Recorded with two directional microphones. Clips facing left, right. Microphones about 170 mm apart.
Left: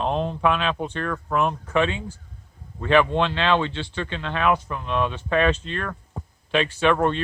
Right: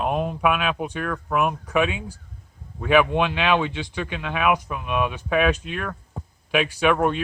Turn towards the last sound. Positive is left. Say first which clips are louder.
# even
turn(degrees=-10)  # may be behind; listen again after turning